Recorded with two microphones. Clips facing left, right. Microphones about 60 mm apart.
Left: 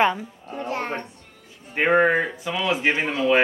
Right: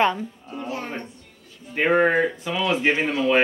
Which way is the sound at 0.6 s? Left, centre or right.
Left.